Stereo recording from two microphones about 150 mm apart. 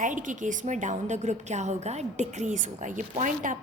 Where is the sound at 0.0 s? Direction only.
60° right (ahead or behind).